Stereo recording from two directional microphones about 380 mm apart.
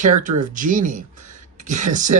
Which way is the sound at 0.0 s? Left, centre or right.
Centre.